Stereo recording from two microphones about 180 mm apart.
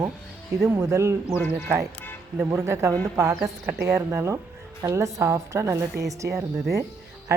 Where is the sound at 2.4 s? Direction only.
15° right (ahead or behind).